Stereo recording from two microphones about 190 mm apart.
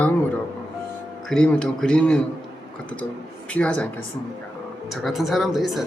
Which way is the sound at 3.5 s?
5° left (ahead or behind).